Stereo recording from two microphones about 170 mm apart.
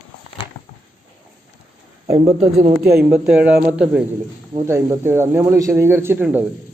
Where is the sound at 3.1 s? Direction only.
5° right (ahead or behind).